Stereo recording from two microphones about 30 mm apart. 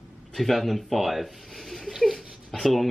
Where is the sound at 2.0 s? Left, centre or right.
Centre.